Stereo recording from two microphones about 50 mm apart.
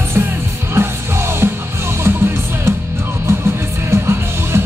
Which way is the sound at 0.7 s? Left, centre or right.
Right.